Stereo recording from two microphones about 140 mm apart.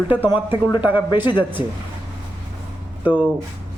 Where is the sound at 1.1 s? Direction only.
35° left (ahead or behind).